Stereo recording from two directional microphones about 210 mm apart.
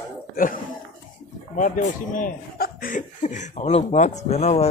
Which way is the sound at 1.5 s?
35° left (ahead or behind).